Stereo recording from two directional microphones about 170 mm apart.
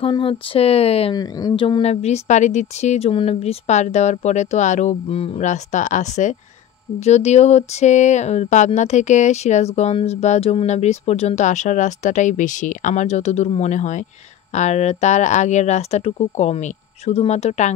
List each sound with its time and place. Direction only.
0.0 s speech: 30° left (ahead or behind)
1.1 s speech: 20° left (ahead or behind); by 17.7 s 40° left (ahead or behind)